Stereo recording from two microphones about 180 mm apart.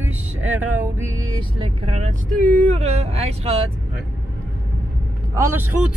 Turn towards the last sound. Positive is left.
turn(degrees=-15)  # may be behind; listen again after turning